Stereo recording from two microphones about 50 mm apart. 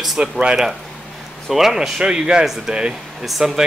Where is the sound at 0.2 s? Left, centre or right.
Centre.